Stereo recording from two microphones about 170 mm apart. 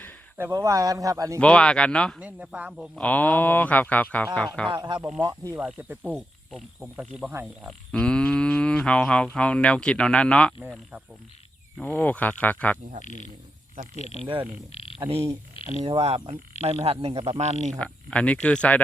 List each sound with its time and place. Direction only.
0.3 s speech: 15° right (ahead or behind)
1.4 s speech: 5° left (ahead or behind)
2.1 s speech: 5° right (ahead or behind); by 4.3 s 10° left (ahead or behind)
4.7 s speech: 25° right (ahead or behind)
4.9 s speech: 5° right (ahead or behind)
7.9 s speech: 5° left (ahead or behind)
10.6 s speech: 5° right (ahead or behind)
11.8 s speech: 10° left (ahead or behind)
13.0 s speech: 45° left (ahead or behind)
14.7 s speech: 35° left (ahead or behind)
14.9 s speech: 35° right (ahead or behind)
15.6 s a sound: 35° left (ahead or behind)
16.0 s speech: 35° right (ahead or behind)
17.7 s speech: 5° left (ahead or behind)